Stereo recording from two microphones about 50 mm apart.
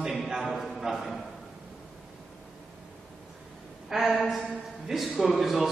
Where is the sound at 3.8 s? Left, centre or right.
Centre.